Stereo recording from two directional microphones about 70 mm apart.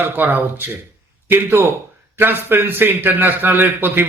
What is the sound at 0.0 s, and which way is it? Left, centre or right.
A man's voice, right.